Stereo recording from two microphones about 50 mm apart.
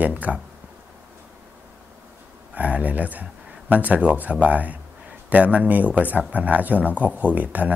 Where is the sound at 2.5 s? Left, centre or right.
Right.